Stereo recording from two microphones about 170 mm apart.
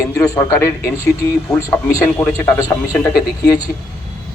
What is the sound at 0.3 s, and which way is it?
A man's voice, 15° left (ahead or behind).